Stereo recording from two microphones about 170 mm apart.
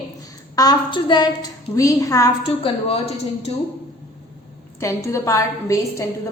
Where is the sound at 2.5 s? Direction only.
35° left (ahead or behind).